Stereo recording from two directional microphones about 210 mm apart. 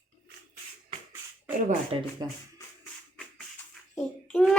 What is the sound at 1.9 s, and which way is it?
Speech, 25° right (ahead or behind).